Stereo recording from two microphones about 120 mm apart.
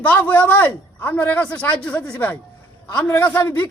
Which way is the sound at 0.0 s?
15° left (ahead or behind).